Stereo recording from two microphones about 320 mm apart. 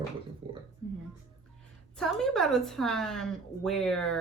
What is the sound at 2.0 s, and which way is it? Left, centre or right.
A woman's voice, centre.